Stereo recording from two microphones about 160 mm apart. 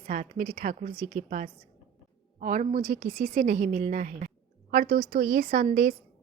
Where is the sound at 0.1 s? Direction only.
55° right (ahead or behind).